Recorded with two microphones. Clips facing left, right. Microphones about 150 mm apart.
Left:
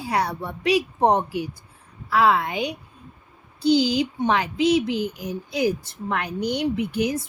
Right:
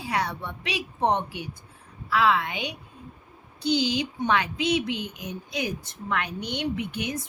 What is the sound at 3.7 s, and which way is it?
A woman's voice, 35° left (ahead or behind).